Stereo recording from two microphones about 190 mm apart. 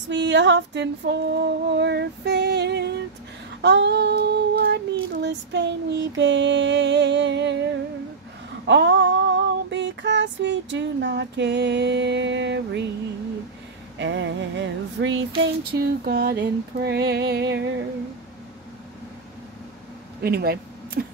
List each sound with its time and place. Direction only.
0.1 s female singing: 65° right (ahead or behind)
8.6 s female singing: 70° right (ahead or behind)
13.9 s female singing: 70° right (ahead or behind)
15.7 s female singing: 55° right (ahead or behind)
20.2 s a sound: 55° right (ahead or behind)